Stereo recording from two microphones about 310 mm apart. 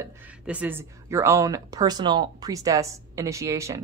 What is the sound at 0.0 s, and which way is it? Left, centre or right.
Speech, centre.